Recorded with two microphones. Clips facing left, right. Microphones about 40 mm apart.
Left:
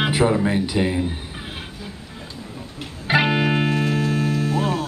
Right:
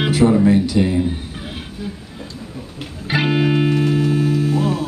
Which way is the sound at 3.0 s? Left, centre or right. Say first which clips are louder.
Right 1 dB; centre.